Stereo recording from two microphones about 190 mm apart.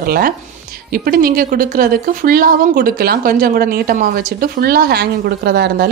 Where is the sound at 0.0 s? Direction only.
50° right (ahead or behind).